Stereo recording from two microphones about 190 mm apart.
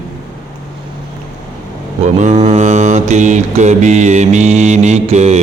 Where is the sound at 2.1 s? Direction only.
35° right (ahead or behind).